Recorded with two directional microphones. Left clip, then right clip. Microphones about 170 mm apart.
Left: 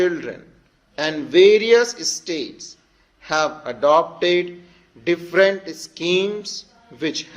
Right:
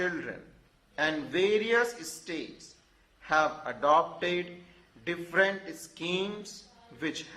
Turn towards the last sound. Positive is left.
turn(degrees=35)  # may be behind; listen again after turning